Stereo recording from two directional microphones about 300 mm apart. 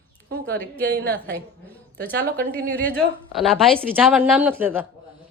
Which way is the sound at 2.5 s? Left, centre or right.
Centre.